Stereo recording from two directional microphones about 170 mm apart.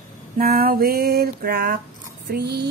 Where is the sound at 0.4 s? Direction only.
60° right (ahead or behind).